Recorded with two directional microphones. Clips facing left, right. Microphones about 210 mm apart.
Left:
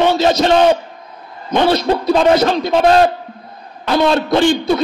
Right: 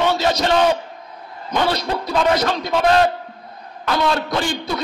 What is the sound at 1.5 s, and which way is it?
A man's voice, 25° left (ahead or behind).